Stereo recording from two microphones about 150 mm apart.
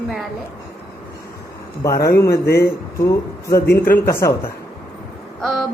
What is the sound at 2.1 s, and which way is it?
Speech, 90° left.